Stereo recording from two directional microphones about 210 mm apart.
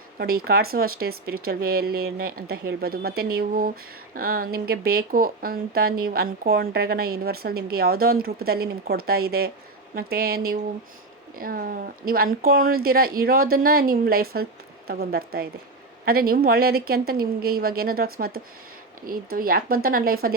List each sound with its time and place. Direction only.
0.2 s speech: 45° right (ahead or behind)